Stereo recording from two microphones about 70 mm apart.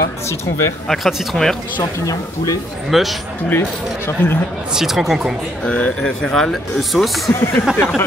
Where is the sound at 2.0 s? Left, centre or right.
Left.